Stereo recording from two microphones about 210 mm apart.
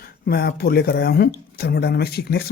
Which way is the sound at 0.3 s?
45° left (ahead or behind).